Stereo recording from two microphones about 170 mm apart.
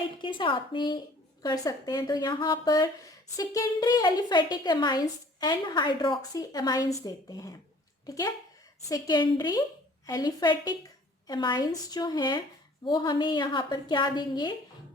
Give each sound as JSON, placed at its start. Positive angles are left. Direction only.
{"t": 0.2, "sound": "a woman's voice", "side_deg": 30}